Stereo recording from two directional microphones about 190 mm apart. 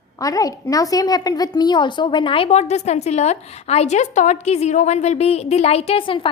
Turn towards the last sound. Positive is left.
turn(degrees=25)  # may be behind; listen again after turning